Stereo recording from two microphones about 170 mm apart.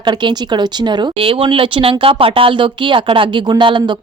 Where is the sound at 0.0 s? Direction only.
25° right (ahead or behind).